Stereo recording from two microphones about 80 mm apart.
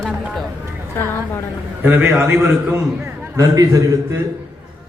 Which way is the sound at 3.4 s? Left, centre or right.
Right.